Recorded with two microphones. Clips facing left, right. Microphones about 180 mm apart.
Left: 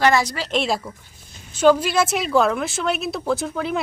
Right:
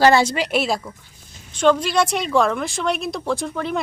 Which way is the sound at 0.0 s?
30° right (ahead or behind).